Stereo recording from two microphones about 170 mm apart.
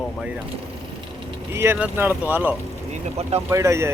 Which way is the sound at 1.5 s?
15° right (ahead or behind).